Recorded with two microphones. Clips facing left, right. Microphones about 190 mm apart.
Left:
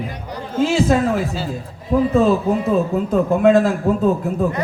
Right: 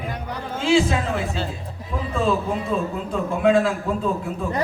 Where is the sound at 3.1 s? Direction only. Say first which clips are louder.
Left 5 dB; 40° left (ahead or behind).